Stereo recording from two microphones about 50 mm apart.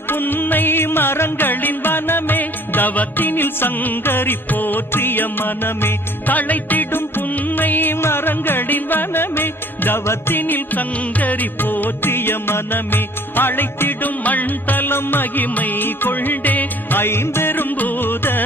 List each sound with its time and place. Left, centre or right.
0.1 s music: left
6.2 s music: left
8.0 s music: left
17.0 s music: left